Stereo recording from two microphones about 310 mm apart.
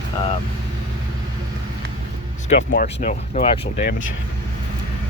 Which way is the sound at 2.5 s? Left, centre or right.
Left.